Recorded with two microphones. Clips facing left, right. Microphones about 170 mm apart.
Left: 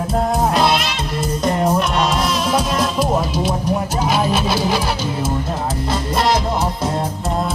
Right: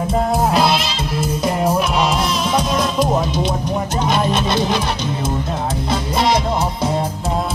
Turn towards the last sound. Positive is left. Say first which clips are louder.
# even
turn(degrees=0)  # may be behind; listen again after turning